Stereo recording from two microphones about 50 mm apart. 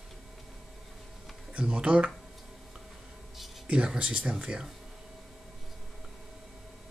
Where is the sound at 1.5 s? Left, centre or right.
Right.